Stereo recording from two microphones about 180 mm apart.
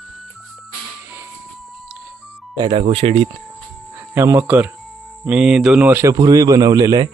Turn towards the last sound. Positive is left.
turn(degrees=-20)  # may be behind; listen again after turning